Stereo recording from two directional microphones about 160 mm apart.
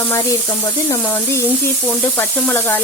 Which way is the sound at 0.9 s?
20° left (ahead or behind).